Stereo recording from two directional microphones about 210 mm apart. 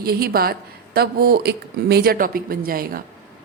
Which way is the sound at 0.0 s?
45° right (ahead or behind).